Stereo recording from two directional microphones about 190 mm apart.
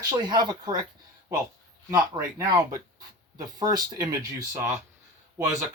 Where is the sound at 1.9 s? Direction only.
15° right (ahead or behind).